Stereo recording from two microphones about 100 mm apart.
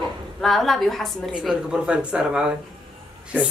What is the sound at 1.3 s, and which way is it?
Speech, 10° right (ahead or behind).